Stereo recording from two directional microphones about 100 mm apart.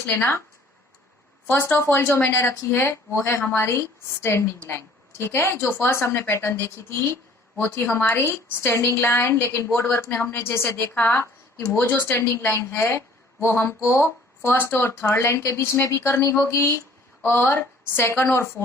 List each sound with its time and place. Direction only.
1.5 s a woman's voice: 20° left (ahead or behind)